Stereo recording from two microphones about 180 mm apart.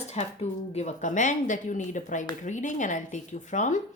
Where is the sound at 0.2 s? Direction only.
35° left (ahead or behind).